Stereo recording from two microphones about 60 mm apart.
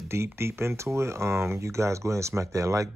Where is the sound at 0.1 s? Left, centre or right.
Right.